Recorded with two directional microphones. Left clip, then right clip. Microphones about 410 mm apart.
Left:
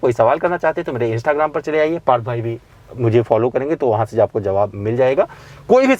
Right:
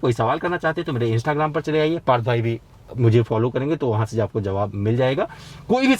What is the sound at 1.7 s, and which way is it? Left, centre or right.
Speech, left.